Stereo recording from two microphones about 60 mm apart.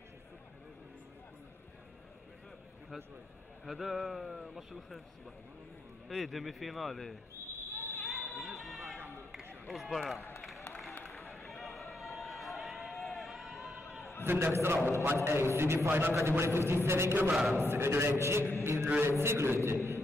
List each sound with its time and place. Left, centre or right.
3.6 s speech: centre
6.0 s speech: centre
8.0 s fire alarm: centre
8.4 s a sound: centre
9.7 s speech: centre
11.1 s run: centre
14.2 s a man's voice: right
17.3 s a man's voice: centre
17.6 s a man's voice: right